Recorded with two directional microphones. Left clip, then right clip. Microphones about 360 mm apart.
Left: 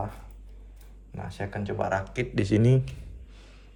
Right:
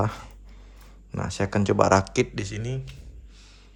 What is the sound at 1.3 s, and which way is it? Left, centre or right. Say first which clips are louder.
Speech: right 9 dB; centre.